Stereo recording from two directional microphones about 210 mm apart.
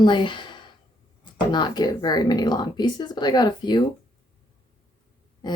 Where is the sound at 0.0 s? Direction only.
20° left (ahead or behind).